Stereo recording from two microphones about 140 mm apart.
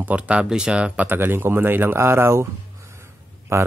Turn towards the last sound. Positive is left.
turn(degrees=-15)  # may be behind; listen again after turning